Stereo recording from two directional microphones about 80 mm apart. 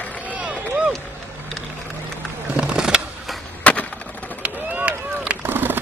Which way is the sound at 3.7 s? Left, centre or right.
Centre.